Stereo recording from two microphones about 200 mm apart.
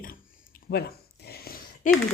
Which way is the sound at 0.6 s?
55° left (ahead or behind).